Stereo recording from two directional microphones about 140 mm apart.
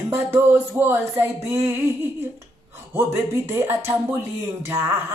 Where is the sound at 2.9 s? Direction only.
20° right (ahead or behind).